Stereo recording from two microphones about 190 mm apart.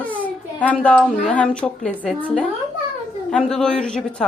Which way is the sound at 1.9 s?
10° right (ahead or behind).